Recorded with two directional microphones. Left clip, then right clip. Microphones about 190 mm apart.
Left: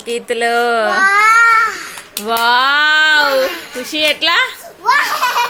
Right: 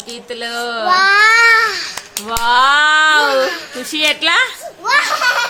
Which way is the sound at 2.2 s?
20° left (ahead or behind).